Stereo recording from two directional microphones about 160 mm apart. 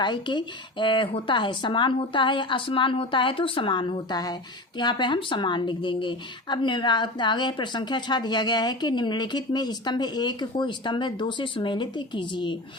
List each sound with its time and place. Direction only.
0.0 s speech: 30° left (ahead or behind)